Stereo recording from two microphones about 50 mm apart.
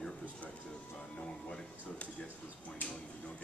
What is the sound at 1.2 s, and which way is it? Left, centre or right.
Speech, centre.